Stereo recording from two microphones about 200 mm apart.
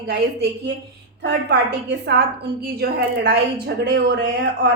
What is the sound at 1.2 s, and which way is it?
A woman's voice, 55° right (ahead or behind).